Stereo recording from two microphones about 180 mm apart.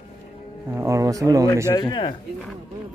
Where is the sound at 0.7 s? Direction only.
15° right (ahead or behind).